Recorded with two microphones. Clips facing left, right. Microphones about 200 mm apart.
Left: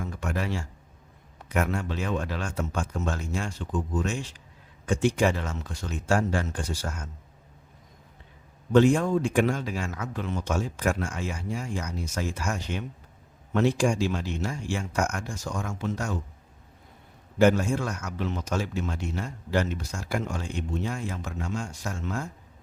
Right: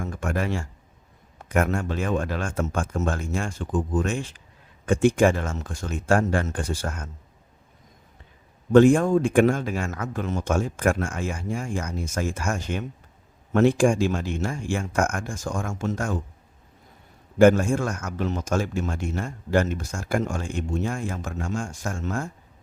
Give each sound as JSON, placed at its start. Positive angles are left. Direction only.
{"t": 0.0, "sound": "a man's voice", "side_deg": -50}
{"t": 8.7, "sound": "a man's voice", "side_deg": -50}
{"t": 17.3, "sound": "a man's voice", "side_deg": -50}